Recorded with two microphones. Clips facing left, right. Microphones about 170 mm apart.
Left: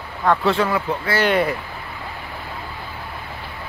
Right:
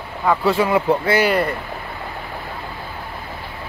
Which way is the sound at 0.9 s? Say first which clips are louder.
Right 7 dB; 30° right (ahead or behind).